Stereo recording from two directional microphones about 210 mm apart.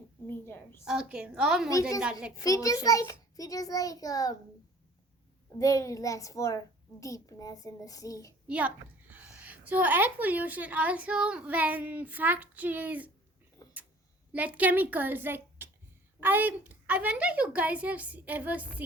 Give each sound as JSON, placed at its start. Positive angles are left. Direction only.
{"t": 0.3, "sound": "a child's voice", "side_deg": 10}
{"t": 0.9, "sound": "a woman's voice", "side_deg": -5}
{"t": 2.4, "sound": "a child's voice", "side_deg": 15}
{"t": 5.5, "sound": "a child's voice", "side_deg": 15}
{"t": 8.4, "sound": "a woman's voice", "side_deg": -5}
{"t": 13.6, "sound": "tick-tock", "side_deg": 15}
{"t": 14.3, "sound": "a woman's voice", "side_deg": -5}